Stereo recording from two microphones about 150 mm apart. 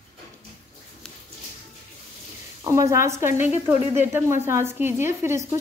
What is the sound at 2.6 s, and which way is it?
A woman's voice, 20° right (ahead or behind).